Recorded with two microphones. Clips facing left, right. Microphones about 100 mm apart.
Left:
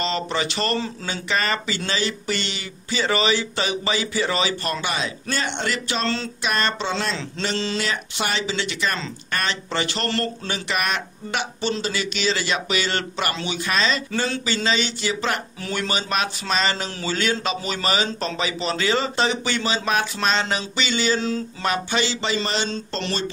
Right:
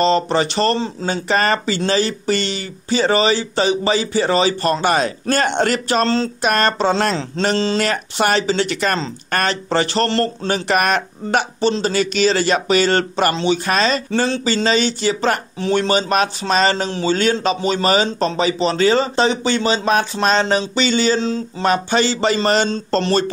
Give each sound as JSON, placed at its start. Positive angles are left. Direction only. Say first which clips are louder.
{"t": 0.0, "sound": "speech", "louder": "right 9 dB", "side_deg": -35}
{"t": 4.8, "sound": "speech", "louder": "right 9 dB", "side_deg": -45}
{"t": 6.0, "sound": "speech", "louder": "right 7 dB", "side_deg": -35}
{"t": 6.4, "sound": "speech", "louder": "right 7 dB", "side_deg": -50}
{"t": 7.5, "sound": "speech", "louder": "right 6 dB", "side_deg": -35}
{"t": 7.8, "sound": "speech", "louder": "right 8 dB", "side_deg": -50}
{"t": 13.7, "sound": "speech", "louder": "right 5 dB", "side_deg": -45}
{"t": 21.6, "sound": "speech", "louder": "right 7 dB", "side_deg": -40}